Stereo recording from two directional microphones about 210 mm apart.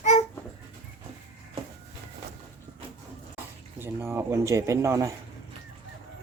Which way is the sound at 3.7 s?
10° right (ahead or behind).